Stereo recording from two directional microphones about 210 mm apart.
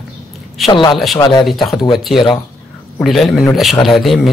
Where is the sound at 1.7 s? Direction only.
20° left (ahead or behind).